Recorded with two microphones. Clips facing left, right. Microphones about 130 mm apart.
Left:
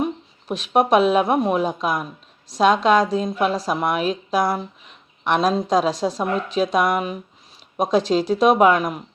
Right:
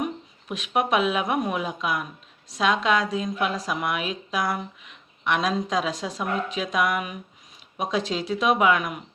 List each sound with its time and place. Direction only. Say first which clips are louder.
0.0 s a woman's voice: left 5 dB; 35° left (ahead or behind)